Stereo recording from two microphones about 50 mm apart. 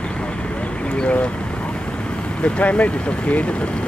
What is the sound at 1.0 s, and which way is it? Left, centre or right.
Vehicle, left.